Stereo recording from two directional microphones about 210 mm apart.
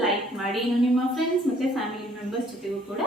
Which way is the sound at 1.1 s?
Centre (ahead or behind).